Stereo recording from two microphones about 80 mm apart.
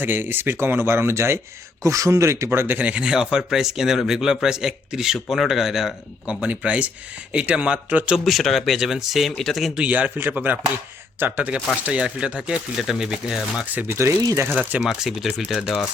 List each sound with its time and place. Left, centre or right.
0.0 s speech: right
2.7 s speech: centre
6.4 s speech: centre
8.2 s speech: centre
9.7 s speech: centre
13.7 s speech: right
14.1 s speech: right
14.8 s speech: centre